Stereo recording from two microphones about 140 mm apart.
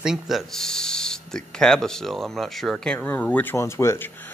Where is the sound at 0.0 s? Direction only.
5° right (ahead or behind).